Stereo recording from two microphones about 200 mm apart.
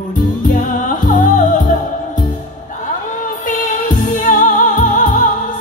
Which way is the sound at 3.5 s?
40° left (ahead or behind).